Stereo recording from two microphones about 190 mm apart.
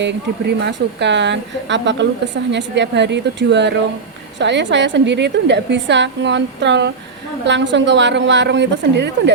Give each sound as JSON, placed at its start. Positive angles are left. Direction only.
{"t": 0.0, "sound": "a woman's voice", "side_deg": -65}